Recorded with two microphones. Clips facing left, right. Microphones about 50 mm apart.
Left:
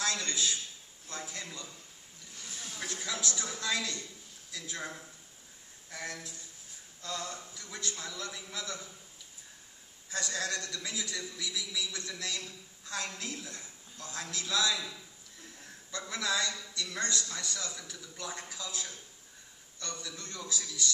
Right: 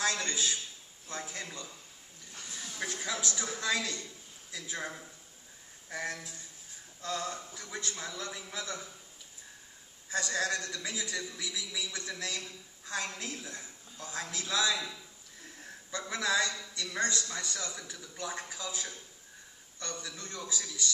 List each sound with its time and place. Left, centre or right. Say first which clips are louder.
0.0 s a man's voice: right 1 dB; centre
2.8 s a man's voice: right 2 dB; centre
10.1 s a man's voice: right 3 dB; centre
15.9 s a man's voice: right 2 dB; centre